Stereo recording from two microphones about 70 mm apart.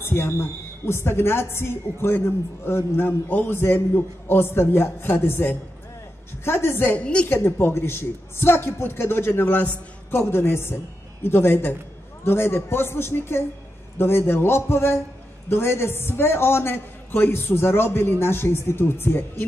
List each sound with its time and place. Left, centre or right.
0.0 s a woman's voice: left
7.0 s a woman's voice: centre
7.2 s a woman's voice: left